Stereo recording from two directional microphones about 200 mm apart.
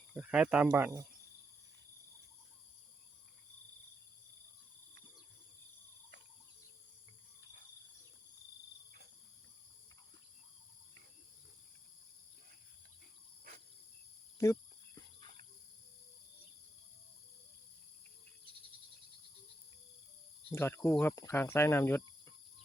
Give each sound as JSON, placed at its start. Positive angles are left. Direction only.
{"t": 0.1, "sound": "speech", "side_deg": -5}
{"t": 14.3, "sound": "speech", "side_deg": 15}
{"t": 20.5, "sound": "speech", "side_deg": 10}